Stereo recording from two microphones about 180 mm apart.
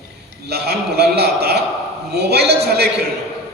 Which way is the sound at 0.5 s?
65° right (ahead or behind).